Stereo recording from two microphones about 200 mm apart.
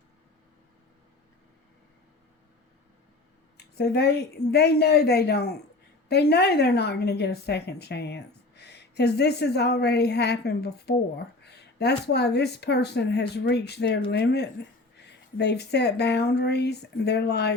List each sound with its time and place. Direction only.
3.6 s a woman's voice: 55° left (ahead or behind)